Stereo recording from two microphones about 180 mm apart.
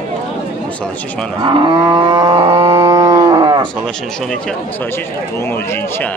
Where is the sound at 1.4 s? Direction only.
25° right (ahead or behind).